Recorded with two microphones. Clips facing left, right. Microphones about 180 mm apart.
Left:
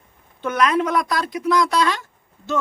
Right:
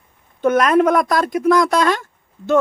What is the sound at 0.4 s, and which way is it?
Speech, 45° right (ahead or behind).